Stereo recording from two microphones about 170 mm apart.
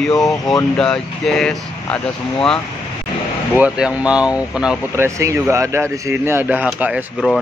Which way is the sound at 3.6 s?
5° right (ahead or behind).